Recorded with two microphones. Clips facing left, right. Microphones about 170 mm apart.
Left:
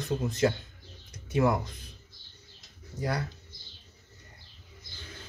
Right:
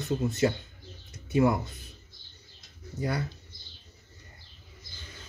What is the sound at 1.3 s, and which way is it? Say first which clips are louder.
Speech: right 2 dB; 5° right (ahead or behind).